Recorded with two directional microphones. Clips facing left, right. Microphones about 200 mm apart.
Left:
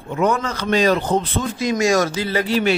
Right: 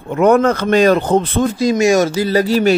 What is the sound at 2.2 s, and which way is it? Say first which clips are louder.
Speech: right 6 dB; 40° right (ahead or behind).